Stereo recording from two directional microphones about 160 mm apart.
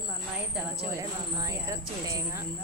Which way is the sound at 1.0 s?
20° right (ahead or behind).